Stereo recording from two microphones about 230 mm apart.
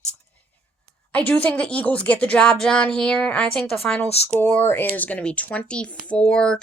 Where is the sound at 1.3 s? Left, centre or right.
Centre.